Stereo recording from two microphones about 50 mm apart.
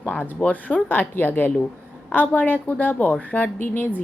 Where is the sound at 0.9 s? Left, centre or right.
Left.